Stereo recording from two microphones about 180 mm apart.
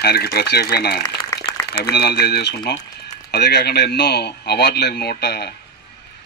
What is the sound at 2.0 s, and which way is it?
Speech, 60° left (ahead or behind).